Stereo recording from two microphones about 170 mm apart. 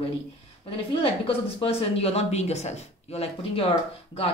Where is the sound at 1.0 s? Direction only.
35° left (ahead or behind).